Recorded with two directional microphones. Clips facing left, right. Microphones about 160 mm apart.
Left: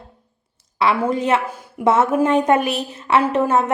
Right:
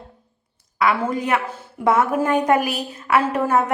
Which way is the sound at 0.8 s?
25° left (ahead or behind).